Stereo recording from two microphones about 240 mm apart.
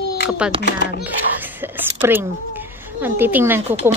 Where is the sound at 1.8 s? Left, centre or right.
Centre.